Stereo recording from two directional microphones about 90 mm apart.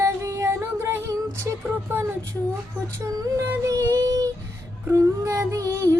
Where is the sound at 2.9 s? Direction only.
40° right (ahead or behind).